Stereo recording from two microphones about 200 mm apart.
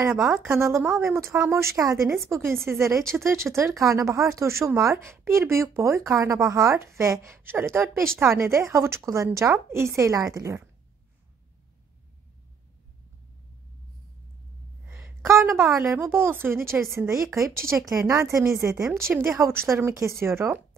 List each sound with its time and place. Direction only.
0.1 s speech: 5° right (ahead or behind)
14.9 s a woman's voice: 10° right (ahead or behind)